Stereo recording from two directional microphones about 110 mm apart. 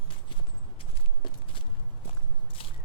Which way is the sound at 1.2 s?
50° left (ahead or behind).